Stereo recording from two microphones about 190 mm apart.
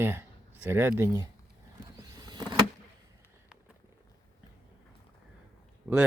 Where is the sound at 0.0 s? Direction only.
10° right (ahead or behind).